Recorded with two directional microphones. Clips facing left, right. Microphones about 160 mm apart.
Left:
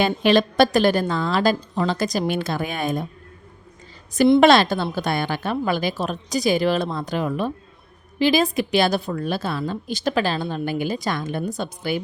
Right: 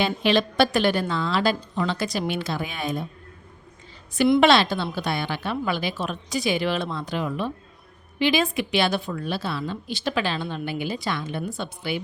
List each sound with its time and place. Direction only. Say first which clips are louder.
0.0 s a woman's voice: left 4 dB; 45° left (ahead or behind)
4.4 s a woman's voice: left 2 dB; 45° left (ahead or behind)